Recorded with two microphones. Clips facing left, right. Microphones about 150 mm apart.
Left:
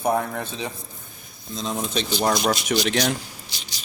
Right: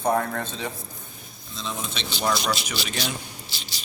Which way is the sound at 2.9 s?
75° left (ahead or behind).